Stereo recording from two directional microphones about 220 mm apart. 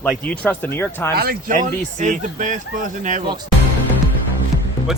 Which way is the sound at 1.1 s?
45° right (ahead or behind).